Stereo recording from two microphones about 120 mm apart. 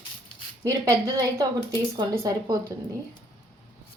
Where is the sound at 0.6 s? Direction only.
25° right (ahead or behind).